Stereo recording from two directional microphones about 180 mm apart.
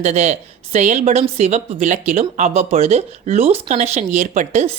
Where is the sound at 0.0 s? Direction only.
40° right (ahead or behind).